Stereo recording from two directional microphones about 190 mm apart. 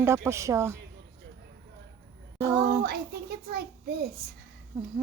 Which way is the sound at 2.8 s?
55° right (ahead or behind).